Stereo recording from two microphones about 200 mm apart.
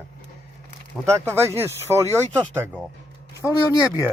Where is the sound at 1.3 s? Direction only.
10° right (ahead or behind).